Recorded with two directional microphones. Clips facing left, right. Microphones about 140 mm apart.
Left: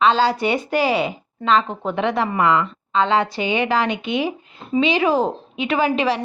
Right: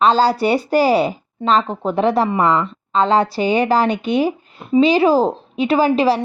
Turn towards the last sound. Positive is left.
turn(degrees=-35)  # may be behind; listen again after turning